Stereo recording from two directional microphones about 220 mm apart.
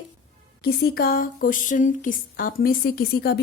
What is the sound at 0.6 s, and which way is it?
Speech, 45° left (ahead or behind).